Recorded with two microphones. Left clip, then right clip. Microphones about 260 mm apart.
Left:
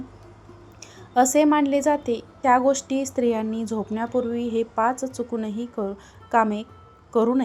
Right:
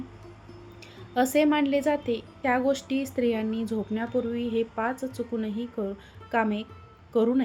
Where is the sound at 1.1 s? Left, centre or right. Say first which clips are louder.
Left 5 dB; centre.